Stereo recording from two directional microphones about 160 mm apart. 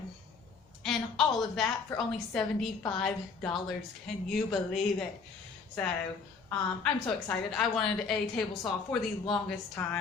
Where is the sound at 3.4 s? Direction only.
5° left (ahead or behind).